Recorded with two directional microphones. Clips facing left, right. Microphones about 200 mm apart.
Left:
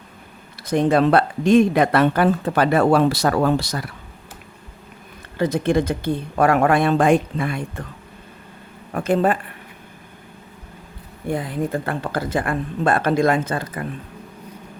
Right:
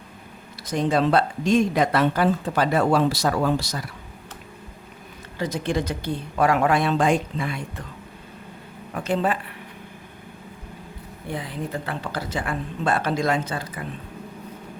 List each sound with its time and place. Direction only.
0.6 s speech: 60° left (ahead or behind)
5.4 s speech: 55° left (ahead or behind)
9.0 s speech: 50° left (ahead or behind)
11.3 s speech: 50° left (ahead or behind)